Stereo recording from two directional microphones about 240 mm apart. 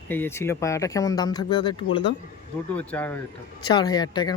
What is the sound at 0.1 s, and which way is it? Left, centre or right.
Speech, centre.